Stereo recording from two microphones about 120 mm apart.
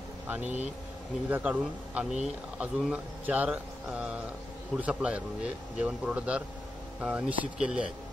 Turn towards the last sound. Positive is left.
turn(degrees=-10)  # may be behind; listen again after turning